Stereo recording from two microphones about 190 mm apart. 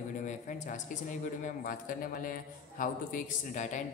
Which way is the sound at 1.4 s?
45° left (ahead or behind).